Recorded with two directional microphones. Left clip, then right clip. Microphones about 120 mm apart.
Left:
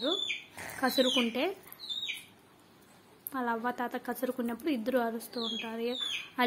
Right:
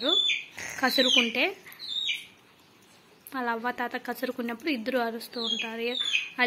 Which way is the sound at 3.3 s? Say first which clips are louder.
Right 3 dB; 5° left (ahead or behind).